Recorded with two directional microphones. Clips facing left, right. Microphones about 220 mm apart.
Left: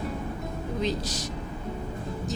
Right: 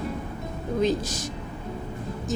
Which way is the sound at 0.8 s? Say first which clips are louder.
Right 6 dB; 50° right (ahead or behind).